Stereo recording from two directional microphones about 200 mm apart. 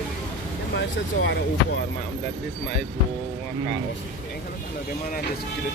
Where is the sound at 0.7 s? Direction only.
65° left (ahead or behind).